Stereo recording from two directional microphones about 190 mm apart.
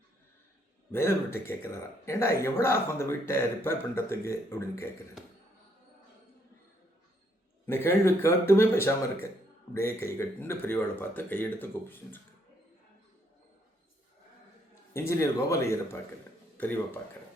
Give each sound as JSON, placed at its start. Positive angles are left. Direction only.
{"t": 0.9, "sound": "speech", "side_deg": 15}
{"t": 7.9, "sound": "speech", "side_deg": 15}
{"t": 14.9, "sound": "speech", "side_deg": 15}